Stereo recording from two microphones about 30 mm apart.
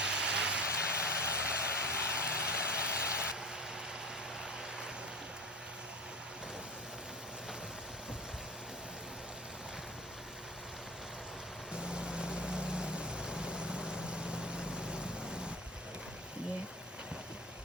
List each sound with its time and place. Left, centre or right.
0.0 s vehicle: right
11.7 s vehicle: right